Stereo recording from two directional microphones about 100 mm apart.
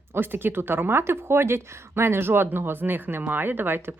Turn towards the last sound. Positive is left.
turn(degrees=-20)  # may be behind; listen again after turning